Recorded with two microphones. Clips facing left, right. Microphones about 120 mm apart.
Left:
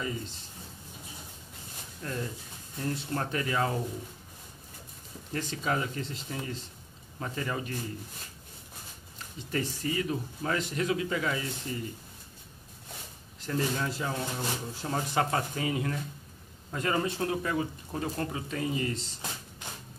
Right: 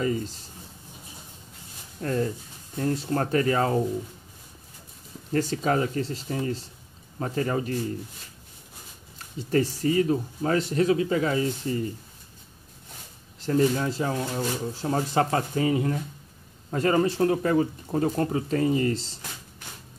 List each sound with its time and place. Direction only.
2.0 s speech: 50° right (ahead or behind)
5.3 s speech: 40° right (ahead or behind)
9.5 s speech: 35° right (ahead or behind)
13.4 s speech: 35° right (ahead or behind)